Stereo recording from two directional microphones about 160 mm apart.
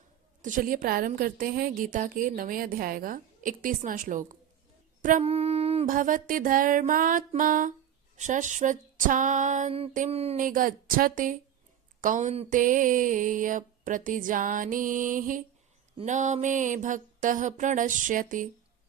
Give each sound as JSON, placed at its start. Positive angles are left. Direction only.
{"t": 0.4, "sound": "a woman's voice", "side_deg": -55}
{"t": 5.2, "sound": "a sound", "side_deg": -40}
{"t": 5.8, "sound": "a woman's voice", "side_deg": -55}
{"t": 8.1, "sound": "music", "side_deg": -50}
{"t": 10.4, "sound": "a woman's voice", "side_deg": -60}
{"t": 11.9, "sound": "music", "side_deg": -55}
{"t": 12.5, "sound": "a woman's voice", "side_deg": -55}
{"t": 16.0, "sound": "music", "side_deg": -50}